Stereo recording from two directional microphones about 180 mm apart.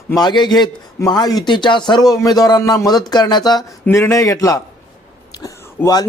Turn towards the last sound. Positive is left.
turn(degrees=20)  # may be behind; listen again after turning